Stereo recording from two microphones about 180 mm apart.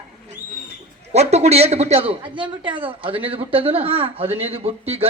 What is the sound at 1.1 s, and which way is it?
A man's voice, 35° right (ahead or behind).